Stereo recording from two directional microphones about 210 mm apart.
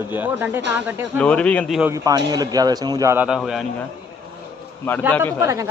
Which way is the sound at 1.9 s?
15° right (ahead or behind).